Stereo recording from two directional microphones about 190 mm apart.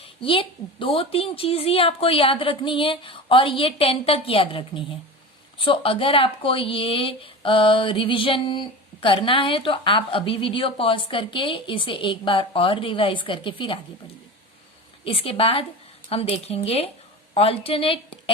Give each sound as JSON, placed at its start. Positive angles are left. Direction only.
{"t": 0.0, "sound": "speech", "side_deg": 30}
{"t": 15.0, "sound": "speech", "side_deg": 30}